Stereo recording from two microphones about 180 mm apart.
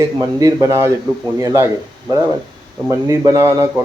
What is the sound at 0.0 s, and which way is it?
A man's voice, 20° right (ahead or behind).